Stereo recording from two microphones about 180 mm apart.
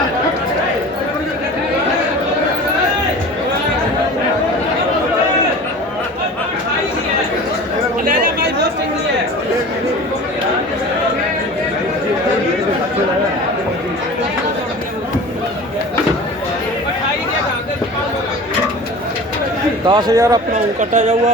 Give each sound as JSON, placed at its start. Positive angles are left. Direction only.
{"t": 19.9, "sound": "a man's voice", "side_deg": -20}
{"t": 20.5, "sound": "speech", "side_deg": -40}